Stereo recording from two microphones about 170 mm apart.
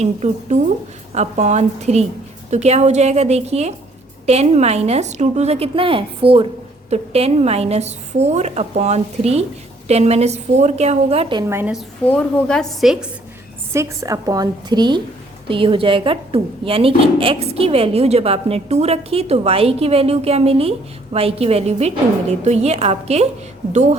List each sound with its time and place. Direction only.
0.0 s a woman's voice: 40° right (ahead or behind)
11.4 s a woman's voice: 15° right (ahead or behind)
12.0 s a woman's voice: 5° left (ahead or behind)
13.7 s a woman's voice: 20° right (ahead or behind); by 23.2 s 40° right (ahead or behind)